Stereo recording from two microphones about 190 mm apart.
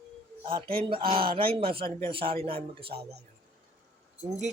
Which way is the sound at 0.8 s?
30° right (ahead or behind).